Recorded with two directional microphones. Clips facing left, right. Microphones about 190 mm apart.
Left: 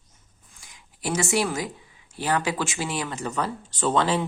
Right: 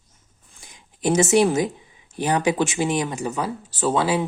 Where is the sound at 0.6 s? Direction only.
25° right (ahead or behind).